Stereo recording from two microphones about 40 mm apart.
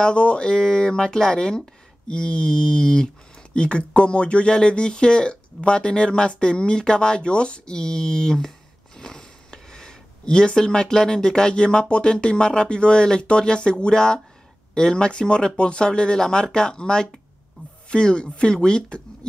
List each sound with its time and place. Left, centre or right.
0.0 s speech: left